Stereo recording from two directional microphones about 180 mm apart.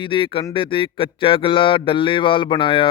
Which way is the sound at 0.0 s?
30° left (ahead or behind).